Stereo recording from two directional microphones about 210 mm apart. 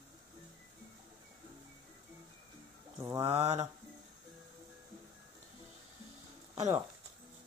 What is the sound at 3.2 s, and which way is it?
Speech, 30° right (ahead or behind).